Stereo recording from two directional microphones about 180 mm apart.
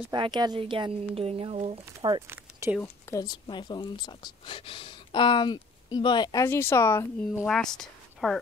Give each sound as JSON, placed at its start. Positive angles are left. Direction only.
{"t": 0.1, "sound": "speech", "side_deg": -25}
{"t": 2.2, "sound": "speech", "side_deg": -15}
{"t": 2.8, "sound": "speech", "side_deg": 15}
{"t": 7.4, "sound": "a woman's voice", "side_deg": 5}